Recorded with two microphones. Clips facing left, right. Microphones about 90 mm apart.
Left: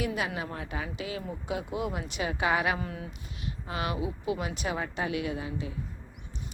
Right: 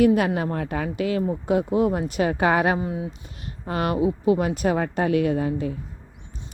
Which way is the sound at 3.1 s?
45° right (ahead or behind).